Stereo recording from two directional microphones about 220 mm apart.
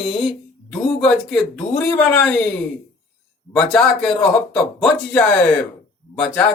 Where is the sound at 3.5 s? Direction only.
5° left (ahead or behind).